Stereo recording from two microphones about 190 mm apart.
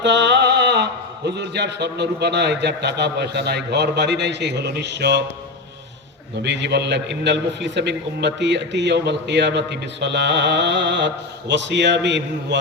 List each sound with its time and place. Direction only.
0.0 s a man's voice: 70° right (ahead or behind)
6.4 s a man's voice: 65° right (ahead or behind)